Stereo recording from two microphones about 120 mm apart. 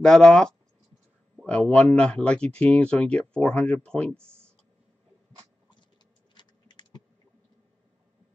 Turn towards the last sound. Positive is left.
turn(degrees=35)  # may be behind; listen again after turning